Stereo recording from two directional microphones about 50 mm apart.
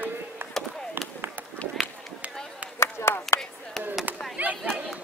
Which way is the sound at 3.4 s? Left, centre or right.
Centre.